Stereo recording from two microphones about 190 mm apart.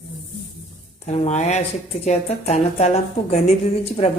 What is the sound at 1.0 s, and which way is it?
A woman's voice, 35° left (ahead or behind).